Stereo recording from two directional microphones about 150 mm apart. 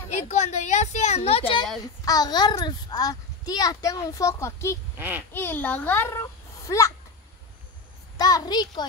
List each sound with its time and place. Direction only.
0.3 s a sound: 50° left (ahead or behind)
1.8 s a child's voice: 25° left (ahead or behind)
4.9 s a child's voice: 10° right (ahead or behind)
5.3 s a child's voice: 15° left (ahead or behind)
8.2 s a child's voice: 25° left (ahead or behind)